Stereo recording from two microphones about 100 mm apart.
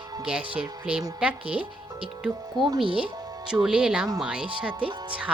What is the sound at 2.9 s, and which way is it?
Speech, 60° right (ahead or behind).